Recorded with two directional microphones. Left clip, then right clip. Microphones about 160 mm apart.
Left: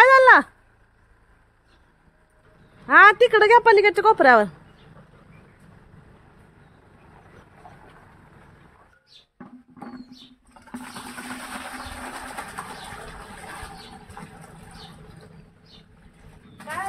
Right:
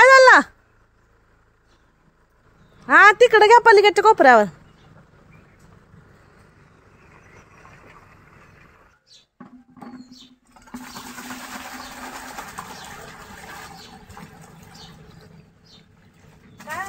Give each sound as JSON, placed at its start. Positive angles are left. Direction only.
{"t": 0.0, "sound": "a sound", "side_deg": -30}
{"t": 2.9, "sound": "a woman's voice", "side_deg": -25}
{"t": 9.4, "sound": "toilet flush", "side_deg": -5}